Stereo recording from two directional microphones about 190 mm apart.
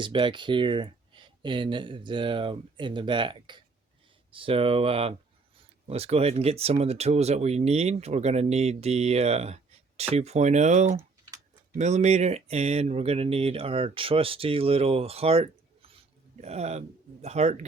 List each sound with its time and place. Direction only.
0.0 s speech: 25° right (ahead or behind)